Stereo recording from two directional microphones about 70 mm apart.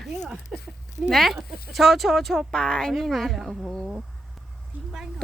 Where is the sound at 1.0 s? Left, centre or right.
Centre.